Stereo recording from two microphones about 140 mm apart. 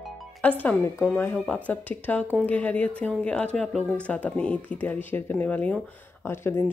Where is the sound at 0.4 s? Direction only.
10° left (ahead or behind).